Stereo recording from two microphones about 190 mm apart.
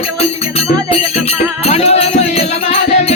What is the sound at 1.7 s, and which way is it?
Music, 35° left (ahead or behind).